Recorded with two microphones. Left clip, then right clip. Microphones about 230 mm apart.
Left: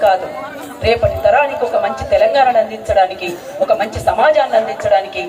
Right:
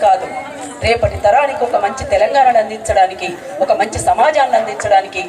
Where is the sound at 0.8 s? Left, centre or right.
Right.